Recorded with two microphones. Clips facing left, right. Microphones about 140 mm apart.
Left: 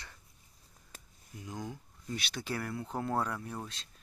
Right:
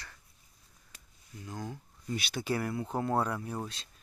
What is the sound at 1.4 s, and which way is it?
Speech, 10° left (ahead or behind).